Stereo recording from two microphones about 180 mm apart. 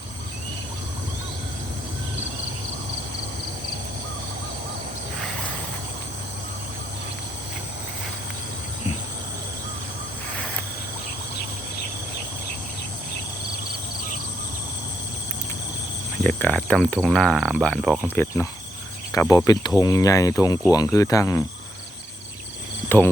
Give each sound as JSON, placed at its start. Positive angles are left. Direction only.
{"t": 16.2, "sound": "speech", "side_deg": 10}